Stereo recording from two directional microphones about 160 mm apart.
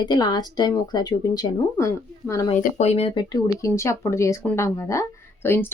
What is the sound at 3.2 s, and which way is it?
Speech, 20° left (ahead or behind).